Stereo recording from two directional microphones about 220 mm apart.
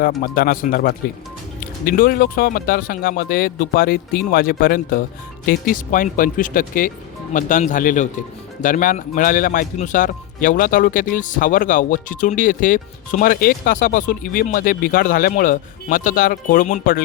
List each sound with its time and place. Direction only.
0.0 s a man's voice: 40° left (ahead or behind)